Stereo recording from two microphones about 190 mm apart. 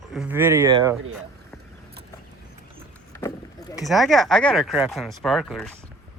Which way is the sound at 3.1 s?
15° left (ahead or behind).